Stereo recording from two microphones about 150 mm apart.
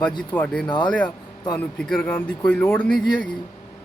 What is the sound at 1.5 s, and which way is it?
Speech, 5° left (ahead or behind).